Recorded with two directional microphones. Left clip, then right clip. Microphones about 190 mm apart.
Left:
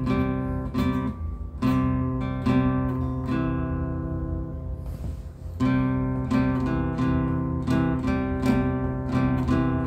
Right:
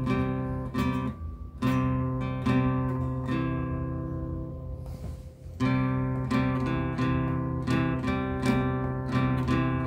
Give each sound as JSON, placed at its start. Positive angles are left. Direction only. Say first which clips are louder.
{"t": 0.0, "sound": "music", "louder": "left 3 dB", "side_deg": -20}
{"t": 5.6, "sound": "music", "louder": "left 3 dB", "side_deg": -25}